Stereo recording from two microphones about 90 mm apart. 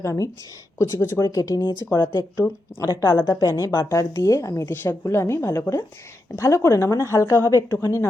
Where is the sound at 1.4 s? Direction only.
40° left (ahead or behind).